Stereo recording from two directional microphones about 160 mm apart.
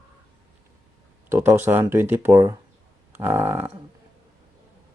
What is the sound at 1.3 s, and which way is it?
Speech, 15° right (ahead or behind).